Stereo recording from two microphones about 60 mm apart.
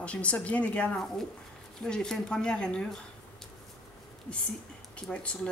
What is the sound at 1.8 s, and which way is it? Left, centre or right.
Speech, centre.